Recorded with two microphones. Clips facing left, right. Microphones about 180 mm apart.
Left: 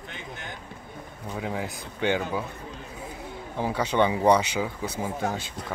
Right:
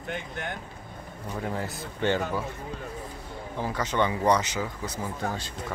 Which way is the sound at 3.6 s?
15° left (ahead or behind).